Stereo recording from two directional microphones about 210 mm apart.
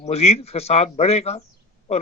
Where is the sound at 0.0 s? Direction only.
30° left (ahead or behind).